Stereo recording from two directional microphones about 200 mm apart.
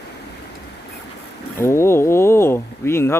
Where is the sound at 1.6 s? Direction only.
15° left (ahead or behind).